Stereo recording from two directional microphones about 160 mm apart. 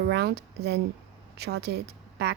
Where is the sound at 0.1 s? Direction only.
90° right.